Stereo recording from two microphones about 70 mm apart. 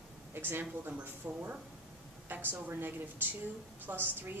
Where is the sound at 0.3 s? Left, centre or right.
Right.